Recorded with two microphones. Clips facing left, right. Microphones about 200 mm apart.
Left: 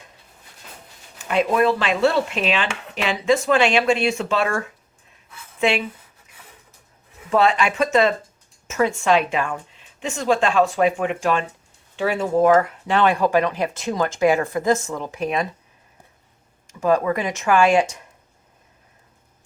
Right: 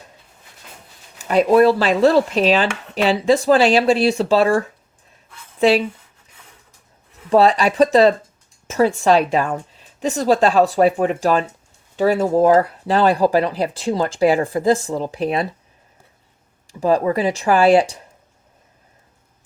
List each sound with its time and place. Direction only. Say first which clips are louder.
1.2 s speech: right 6 dB; 40° right (ahead or behind)
7.3 s speech: right 4 dB; 35° right (ahead or behind)
16.6 s speech: right 2 dB; 35° right (ahead or behind)